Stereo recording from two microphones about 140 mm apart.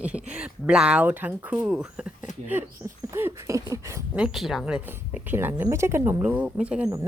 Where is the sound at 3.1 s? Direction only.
20° right (ahead or behind).